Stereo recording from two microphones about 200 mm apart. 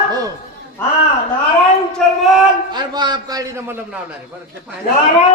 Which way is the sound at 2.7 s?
20° right (ahead or behind).